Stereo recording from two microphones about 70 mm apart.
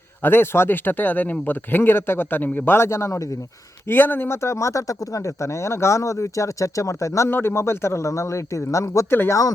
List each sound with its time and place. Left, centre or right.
0.2 s speech: left
3.8 s speech: left
7.3 s speech: left